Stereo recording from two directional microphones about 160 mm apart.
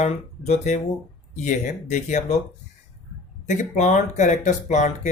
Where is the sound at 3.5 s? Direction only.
50° left (ahead or behind).